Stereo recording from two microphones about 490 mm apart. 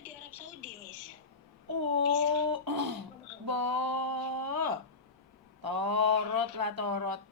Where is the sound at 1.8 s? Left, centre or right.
Right.